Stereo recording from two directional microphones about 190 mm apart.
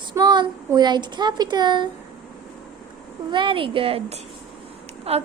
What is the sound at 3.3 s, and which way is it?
A woman's voice, 25° right (ahead or behind).